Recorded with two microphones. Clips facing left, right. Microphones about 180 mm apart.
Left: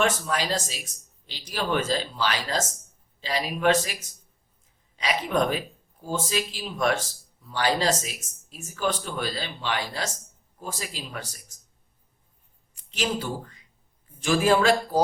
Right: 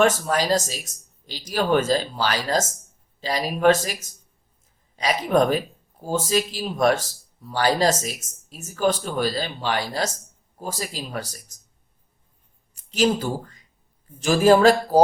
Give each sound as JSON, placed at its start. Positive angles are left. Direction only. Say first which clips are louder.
{"t": 0.0, "sound": "speech", "louder": "right 5 dB", "side_deg": -40}
{"t": 12.7, "sound": "speech", "louder": "right 8 dB", "side_deg": -40}